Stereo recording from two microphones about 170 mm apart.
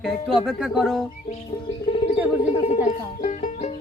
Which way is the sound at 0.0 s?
Centre (ahead or behind).